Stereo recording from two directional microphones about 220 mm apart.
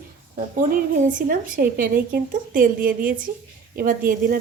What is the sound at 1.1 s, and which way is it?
A woman's voice, 40° right (ahead or behind).